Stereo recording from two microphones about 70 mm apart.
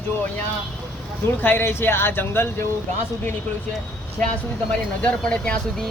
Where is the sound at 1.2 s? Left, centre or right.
Left.